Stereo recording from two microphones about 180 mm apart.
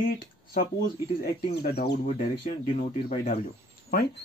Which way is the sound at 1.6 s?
65° left (ahead or behind).